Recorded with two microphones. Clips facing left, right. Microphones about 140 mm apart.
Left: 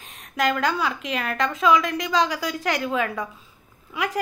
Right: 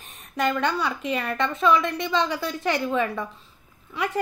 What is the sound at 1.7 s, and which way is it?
Speech, 90° left.